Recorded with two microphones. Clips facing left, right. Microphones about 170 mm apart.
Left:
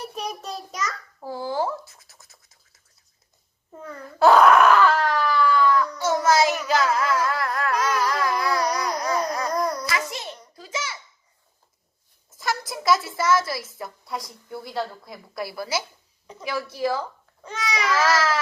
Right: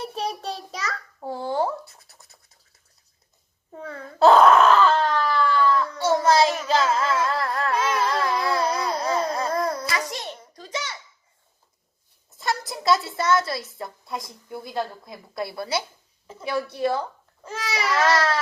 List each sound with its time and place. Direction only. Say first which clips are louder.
0.0 s a child's voice: right 3 dB; 30° right (ahead or behind)
4.2 s a sound: right 1 dB; 25° right (ahead or behind)
5.2 s baby cry: left 1 dB; 25° right (ahead or behind)
6.6 s carnatic music: even; 25° right (ahead or behind)
10.1 s a sound: right 1 dB; centre (ahead or behind)
12.5 s a sound: even; 25° right (ahead or behind)
13.1 s a woman's voice: even; 25° right (ahead or behind)
17.4 s speech: left 1 dB; 5° right (ahead or behind)
18.0 s a woman's voice: right 2 dB; 30° right (ahead or behind)